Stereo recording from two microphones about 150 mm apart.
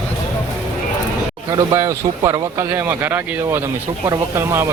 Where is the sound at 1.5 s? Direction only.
20° right (ahead or behind).